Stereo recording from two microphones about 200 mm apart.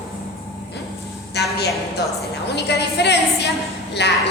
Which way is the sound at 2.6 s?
55° left (ahead or behind).